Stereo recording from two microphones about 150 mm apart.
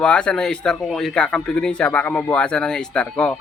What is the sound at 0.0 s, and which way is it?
Speech, 5° left (ahead or behind).